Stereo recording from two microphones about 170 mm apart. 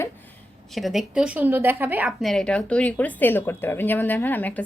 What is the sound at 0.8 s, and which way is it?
A woman's voice, centre (ahead or behind).